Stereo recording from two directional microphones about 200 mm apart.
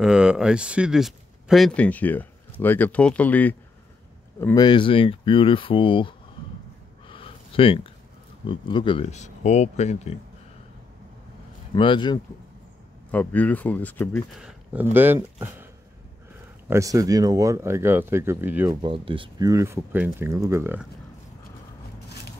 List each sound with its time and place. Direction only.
0.0 s speech: 5° right (ahead or behind); by 6.1 s 25° left (ahead or behind)
7.1 s a sound: 25° left (ahead or behind)
8.5 s speech: 25° left (ahead or behind)
11.7 s speech: 25° left (ahead or behind)
13.1 s speech: 10° left (ahead or behind)
14.4 s speech: 10° right (ahead or behind)
18.8 s speech: 25° right (ahead or behind)